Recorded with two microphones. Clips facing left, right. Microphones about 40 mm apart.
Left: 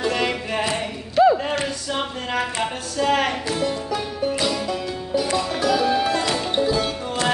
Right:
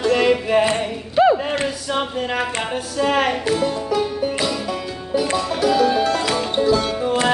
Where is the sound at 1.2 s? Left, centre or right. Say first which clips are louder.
Right 1 dB; right.